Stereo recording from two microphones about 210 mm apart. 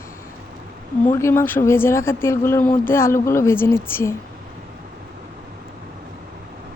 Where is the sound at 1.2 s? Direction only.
10° left (ahead or behind).